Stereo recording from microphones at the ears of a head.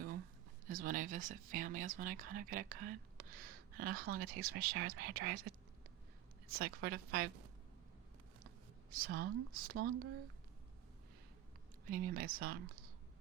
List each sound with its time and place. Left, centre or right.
0.7 s speech: right
11.9 s speech: right